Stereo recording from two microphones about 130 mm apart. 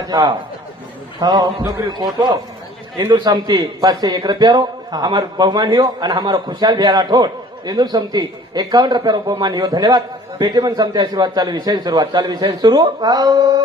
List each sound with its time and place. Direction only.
0.1 s a man's voice: 35° right (ahead or behind)
3.1 s a man's voice: 35° right (ahead or behind)